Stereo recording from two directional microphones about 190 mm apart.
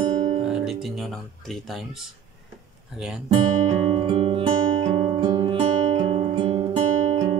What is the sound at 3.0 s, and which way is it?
Speech, 5° right (ahead or behind).